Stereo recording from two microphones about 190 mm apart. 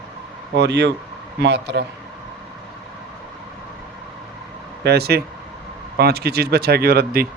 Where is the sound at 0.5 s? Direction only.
65° right (ahead or behind).